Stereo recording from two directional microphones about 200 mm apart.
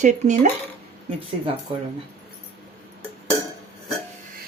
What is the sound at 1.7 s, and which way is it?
Speech, 25° right (ahead or behind).